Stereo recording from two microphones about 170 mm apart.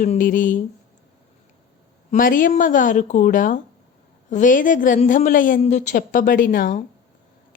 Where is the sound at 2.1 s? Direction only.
55° left (ahead or behind).